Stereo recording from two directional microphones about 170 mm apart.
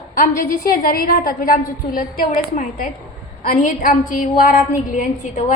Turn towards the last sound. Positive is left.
turn(degrees=50)  # may be behind; listen again after turning